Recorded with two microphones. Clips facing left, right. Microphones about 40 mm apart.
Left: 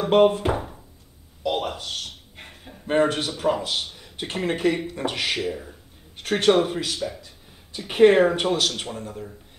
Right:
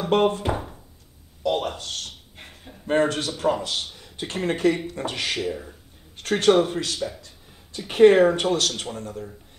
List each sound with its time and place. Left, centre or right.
0.0 s speech: centre
1.4 s a sound: centre
2.9 s a man's voice: left
3.3 s speech: centre
3.8 s a sound: centre
4.3 s speech: centre
5.0 s a man's voice: left
5.3 s speech: centre
6.1 s speech: centre